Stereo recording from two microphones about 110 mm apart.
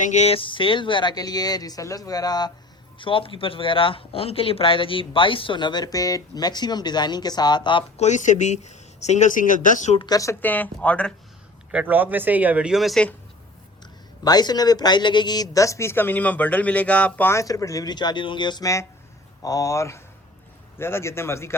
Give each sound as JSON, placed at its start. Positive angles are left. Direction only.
{"t": 0.1, "sound": "speech", "side_deg": 90}
{"t": 0.3, "sound": "speech", "side_deg": 50}
{"t": 3.0, "sound": "speech", "side_deg": 50}
{"t": 7.9, "sound": "speech", "side_deg": 90}
{"t": 10.1, "sound": "speech", "side_deg": 30}
{"t": 10.4, "sound": "speech", "side_deg": 15}
{"t": 11.7, "sound": "speech", "side_deg": -15}
{"t": 14.3, "sound": "speech", "side_deg": 40}
{"t": 17.3, "sound": "speech", "side_deg": 30}